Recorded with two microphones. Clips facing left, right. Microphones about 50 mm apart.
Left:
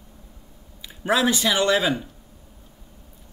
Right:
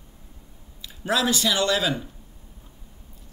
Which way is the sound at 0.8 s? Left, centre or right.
Left.